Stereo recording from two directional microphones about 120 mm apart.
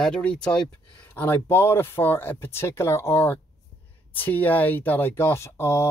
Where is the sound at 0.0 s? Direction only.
5° left (ahead or behind).